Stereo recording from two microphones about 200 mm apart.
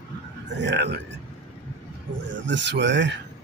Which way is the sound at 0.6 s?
60° right (ahead or behind).